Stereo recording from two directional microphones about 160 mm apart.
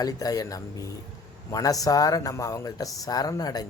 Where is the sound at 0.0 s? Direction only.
25° left (ahead or behind).